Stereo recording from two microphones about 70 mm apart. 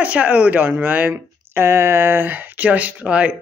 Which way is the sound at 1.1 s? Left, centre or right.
Right.